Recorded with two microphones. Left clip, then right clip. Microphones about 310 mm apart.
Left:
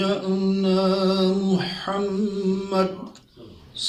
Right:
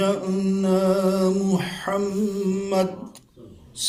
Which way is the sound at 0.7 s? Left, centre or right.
Right.